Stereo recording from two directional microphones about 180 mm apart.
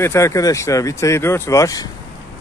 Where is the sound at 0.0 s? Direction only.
15° left (ahead or behind).